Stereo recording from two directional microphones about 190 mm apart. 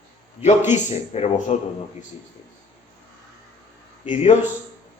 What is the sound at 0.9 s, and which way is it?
Speech, 35° left (ahead or behind).